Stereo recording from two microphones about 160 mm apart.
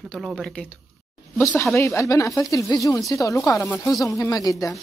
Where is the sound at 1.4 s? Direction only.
20° left (ahead or behind).